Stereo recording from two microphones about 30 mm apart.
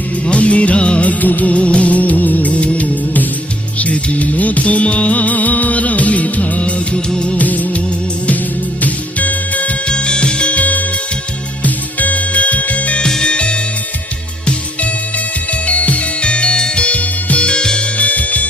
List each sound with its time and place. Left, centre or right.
0.3 s music: left
1.2 s music: left
1.5 s music: left
2.5 s music: left
7.3 s music: left
8.8 s music: left
9.8 s music: left
10.5 s music: left
13.2 s music: left
15.6 s music: left
16.2 s music: left
16.8 s music: left
17.4 s music: left
17.9 s music: left